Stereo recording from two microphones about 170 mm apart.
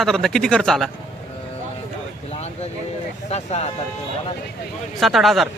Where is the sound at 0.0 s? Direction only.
Centre (ahead or behind).